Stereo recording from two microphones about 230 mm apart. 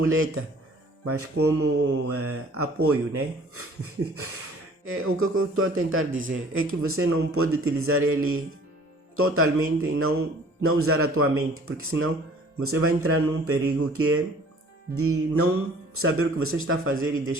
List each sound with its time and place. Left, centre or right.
0.0 s a man's voice: right
1.6 s speech: right
4.9 s a man's voice: right